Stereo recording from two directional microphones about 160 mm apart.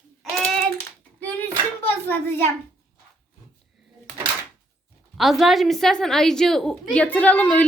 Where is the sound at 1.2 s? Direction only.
10° left (ahead or behind).